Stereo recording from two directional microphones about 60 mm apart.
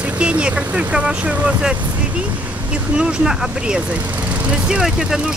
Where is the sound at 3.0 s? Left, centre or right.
Centre.